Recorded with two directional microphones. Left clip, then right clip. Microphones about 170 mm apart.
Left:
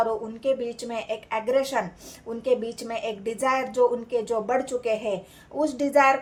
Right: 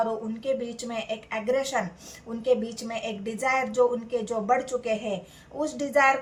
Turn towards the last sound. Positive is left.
turn(degrees=40)  # may be behind; listen again after turning